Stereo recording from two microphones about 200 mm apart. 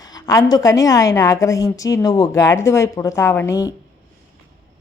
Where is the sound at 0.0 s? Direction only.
20° left (ahead or behind).